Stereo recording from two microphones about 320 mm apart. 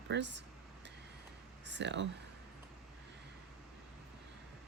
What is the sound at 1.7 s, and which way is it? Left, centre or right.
Speech, right.